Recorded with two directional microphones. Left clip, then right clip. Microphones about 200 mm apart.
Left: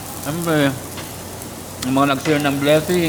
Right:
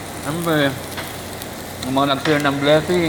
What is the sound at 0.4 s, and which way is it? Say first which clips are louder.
Speech: even; 30° left (ahead or behind).